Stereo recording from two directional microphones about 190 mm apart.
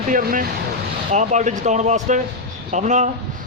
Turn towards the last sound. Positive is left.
turn(degrees=-40)  # may be behind; listen again after turning